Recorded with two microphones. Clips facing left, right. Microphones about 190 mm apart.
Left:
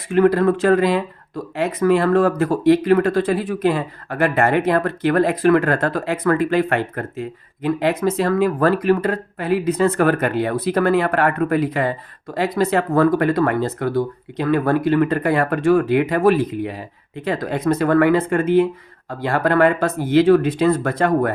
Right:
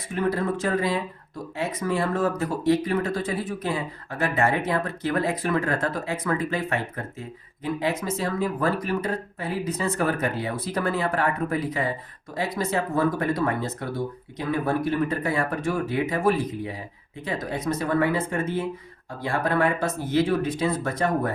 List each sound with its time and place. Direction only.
0.1 s speech: 70° left (ahead or behind)
17.2 s speech: 60° left (ahead or behind)